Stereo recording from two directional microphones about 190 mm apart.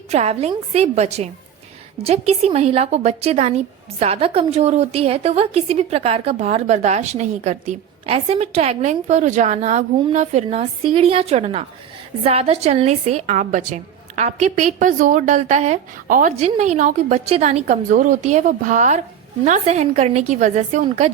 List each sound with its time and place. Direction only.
0.1 s a woman's voice: 35° right (ahead or behind)
16.3 s a woman's voice: 35° right (ahead or behind)